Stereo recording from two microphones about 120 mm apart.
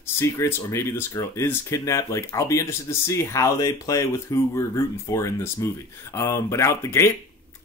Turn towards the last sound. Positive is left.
turn(degrees=20)  # may be behind; listen again after turning